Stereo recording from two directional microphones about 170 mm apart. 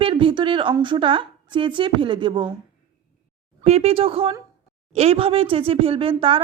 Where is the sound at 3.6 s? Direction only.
35° right (ahead or behind).